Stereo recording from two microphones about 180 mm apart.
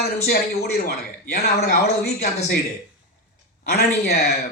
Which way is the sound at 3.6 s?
60° left (ahead or behind).